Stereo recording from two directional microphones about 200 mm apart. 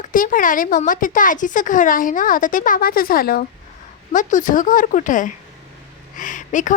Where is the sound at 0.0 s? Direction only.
40° left (ahead or behind).